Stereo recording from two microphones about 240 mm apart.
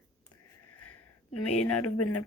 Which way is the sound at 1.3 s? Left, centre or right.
Left.